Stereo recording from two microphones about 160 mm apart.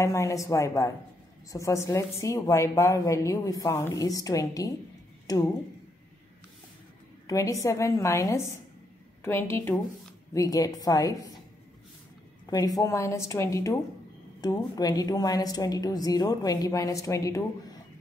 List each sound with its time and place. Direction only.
0.0 s a woman's voice: 20° left (ahead or behind)
5.2 s a sound: 25° left (ahead or behind)
7.2 s a woman's voice: 20° left (ahead or behind)
12.4 s a woman's voice: 25° left (ahead or behind)